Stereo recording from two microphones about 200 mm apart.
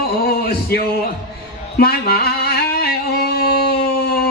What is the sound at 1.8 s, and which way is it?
Music, 50° left (ahead or behind).